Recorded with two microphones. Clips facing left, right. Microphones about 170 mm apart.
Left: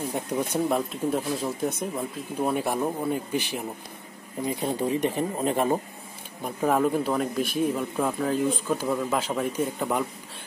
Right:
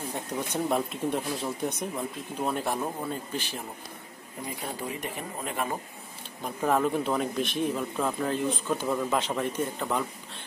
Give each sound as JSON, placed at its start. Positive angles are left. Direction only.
{"t": 0.7, "sound": "speech", "side_deg": 0}
{"t": 4.5, "sound": "speech", "side_deg": 25}
{"t": 6.4, "sound": "speech", "side_deg": 5}